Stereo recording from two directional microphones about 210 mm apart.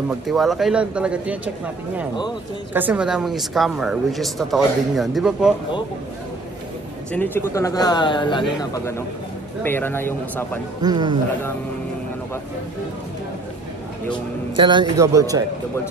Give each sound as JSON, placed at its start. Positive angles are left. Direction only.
{"t": 0.3, "sound": "speech", "side_deg": 0}
{"t": 2.7, "sound": "speech", "side_deg": -10}
{"t": 7.1, "sound": "a man's voice", "side_deg": 10}
{"t": 10.8, "sound": "a man's voice", "side_deg": -20}
{"t": 14.6, "sound": "speech", "side_deg": -20}